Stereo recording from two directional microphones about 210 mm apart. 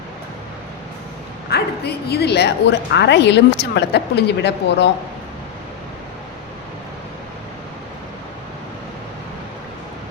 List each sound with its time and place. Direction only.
1.5 s speech: 50° left (ahead or behind)